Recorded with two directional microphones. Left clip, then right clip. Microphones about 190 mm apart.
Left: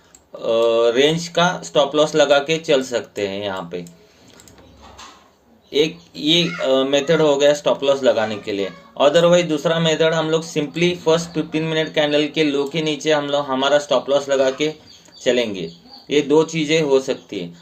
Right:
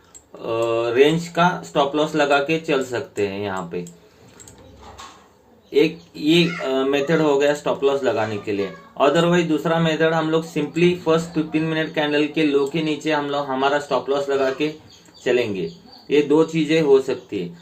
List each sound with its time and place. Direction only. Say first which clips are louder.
0.4 s speech: left 6 dB; 35° left (ahead or behind)
5.7 s speech: right 1 dB; 35° left (ahead or behind)
7.3 s speech: left 3 dB; 35° left (ahead or behind)
16.1 s speech: left 1 dB; 35° left (ahead or behind)